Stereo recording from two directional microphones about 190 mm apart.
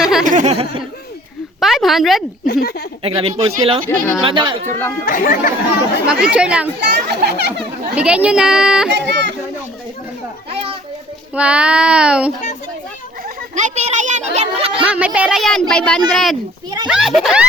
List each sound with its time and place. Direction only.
0.0 s a sound: centre (ahead or behind)
0.3 s a sound: 35° right (ahead or behind)
1.6 s a child's voice: centre (ahead or behind)
2.5 s speech: 55° left (ahead or behind)
3.0 s speech: 30° right (ahead or behind)
5.0 s speech: 45° left (ahead or behind)
6.1 s a child's voice: 5° right (ahead or behind)
6.7 s a child's voice: 60° right (ahead or behind)
7.9 s a child's voice: 5° right (ahead or behind)
9.0 s speech: 65° right (ahead or behind)
11.3 s a child's voice: 5° right (ahead or behind)
13.2 s a child's voice: 40° right (ahead or behind)
14.8 s a child's voice: 5° right (ahead or behind)